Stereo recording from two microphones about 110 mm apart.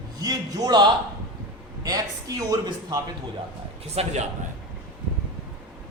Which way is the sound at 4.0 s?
70° right (ahead or behind).